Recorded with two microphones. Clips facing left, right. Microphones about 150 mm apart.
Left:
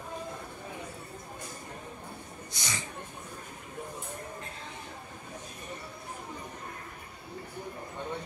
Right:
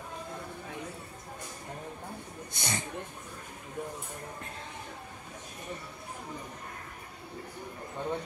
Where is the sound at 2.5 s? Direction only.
55° right (ahead or behind).